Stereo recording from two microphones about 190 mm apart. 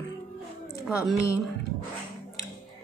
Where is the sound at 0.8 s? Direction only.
5° right (ahead or behind).